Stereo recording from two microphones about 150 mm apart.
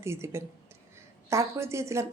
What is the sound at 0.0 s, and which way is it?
A woman's voice, 20° right (ahead or behind).